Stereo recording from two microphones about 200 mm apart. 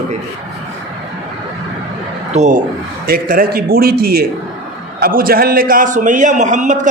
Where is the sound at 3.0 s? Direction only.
45° right (ahead or behind).